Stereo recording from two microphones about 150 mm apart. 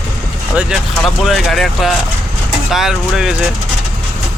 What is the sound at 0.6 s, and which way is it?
Speech, 5° right (ahead or behind).